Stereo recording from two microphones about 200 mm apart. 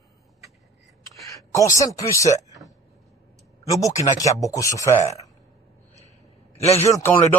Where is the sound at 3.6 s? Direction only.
15° left (ahead or behind).